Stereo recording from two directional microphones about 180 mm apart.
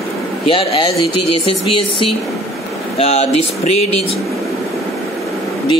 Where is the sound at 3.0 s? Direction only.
35° left (ahead or behind).